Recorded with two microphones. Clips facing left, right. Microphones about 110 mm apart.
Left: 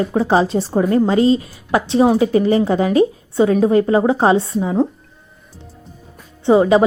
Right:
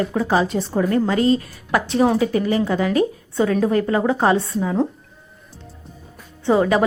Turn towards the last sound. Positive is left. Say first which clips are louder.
# left 5 dB
turn(degrees=20)  # may be behind; listen again after turning